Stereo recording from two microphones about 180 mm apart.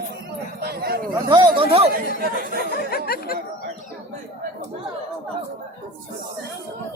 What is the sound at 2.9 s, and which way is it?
Speech, 55° left (ahead or behind).